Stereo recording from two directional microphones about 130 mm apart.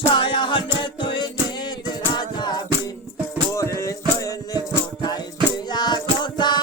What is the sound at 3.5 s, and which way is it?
Music, 20° left (ahead or behind).